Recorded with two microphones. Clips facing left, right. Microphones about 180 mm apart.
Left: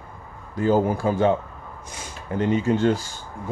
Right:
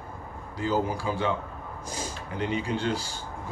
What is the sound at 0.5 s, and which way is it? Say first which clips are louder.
Speech: left 7 dB; 50° left (ahead or behind).